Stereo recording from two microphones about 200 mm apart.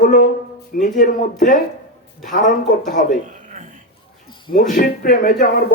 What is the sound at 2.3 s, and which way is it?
Speech, 40° left (ahead or behind).